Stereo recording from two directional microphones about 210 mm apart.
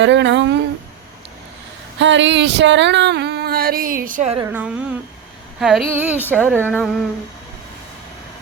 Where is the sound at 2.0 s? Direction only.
60° right (ahead or behind); by 4.3 s 35° right (ahead or behind).